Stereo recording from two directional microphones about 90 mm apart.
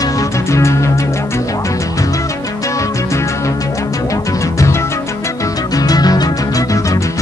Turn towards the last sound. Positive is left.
turn(degrees=45)  # may be behind; listen again after turning